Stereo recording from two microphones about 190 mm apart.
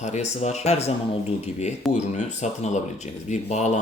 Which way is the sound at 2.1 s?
40° left (ahead or behind).